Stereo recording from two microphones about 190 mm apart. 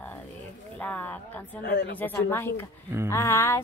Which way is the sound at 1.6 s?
55° left (ahead or behind).